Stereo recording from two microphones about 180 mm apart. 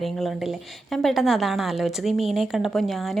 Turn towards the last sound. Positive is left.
turn(degrees=0)  # may be behind; listen again after turning